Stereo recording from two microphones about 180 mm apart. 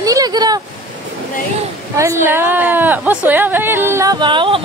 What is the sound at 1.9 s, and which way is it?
A woman's voice, 15° right (ahead or behind).